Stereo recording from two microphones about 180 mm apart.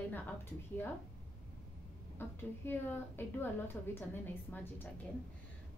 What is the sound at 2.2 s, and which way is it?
A woman's voice, 10° left (ahead or behind).